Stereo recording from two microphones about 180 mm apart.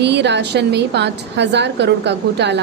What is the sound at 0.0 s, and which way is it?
A woman's voice, 70° right (ahead or behind).